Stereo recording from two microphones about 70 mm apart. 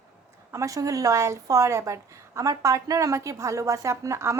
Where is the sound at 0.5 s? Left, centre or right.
Right.